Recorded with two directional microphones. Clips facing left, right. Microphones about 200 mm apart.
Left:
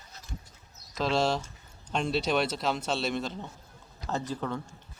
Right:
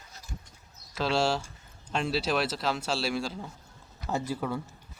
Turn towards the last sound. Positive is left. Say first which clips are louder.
# right 1 dB
turn(degrees=-10)  # may be behind; listen again after turning